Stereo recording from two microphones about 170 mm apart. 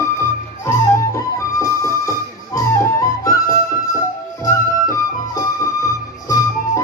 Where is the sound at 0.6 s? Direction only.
20° left (ahead or behind).